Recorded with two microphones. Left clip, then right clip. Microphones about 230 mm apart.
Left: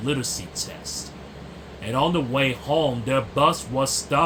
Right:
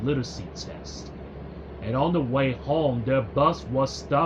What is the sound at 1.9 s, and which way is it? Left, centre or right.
Speech, centre.